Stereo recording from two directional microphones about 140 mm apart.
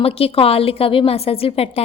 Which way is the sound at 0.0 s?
45° left (ahead or behind).